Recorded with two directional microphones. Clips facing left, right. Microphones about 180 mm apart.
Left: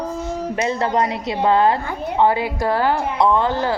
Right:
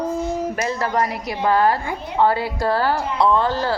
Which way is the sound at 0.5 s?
25° left (ahead or behind).